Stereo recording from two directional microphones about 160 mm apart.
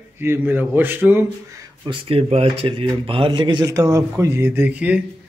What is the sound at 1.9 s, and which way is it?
Speech, 35° right (ahead or behind).